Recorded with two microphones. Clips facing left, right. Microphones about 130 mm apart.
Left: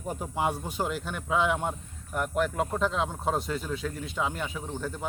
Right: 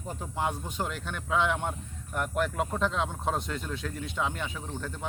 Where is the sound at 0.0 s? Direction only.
10° left (ahead or behind).